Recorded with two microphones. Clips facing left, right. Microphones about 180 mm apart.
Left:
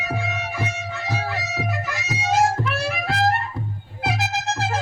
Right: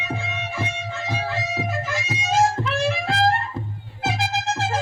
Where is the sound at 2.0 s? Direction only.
25° right (ahead or behind).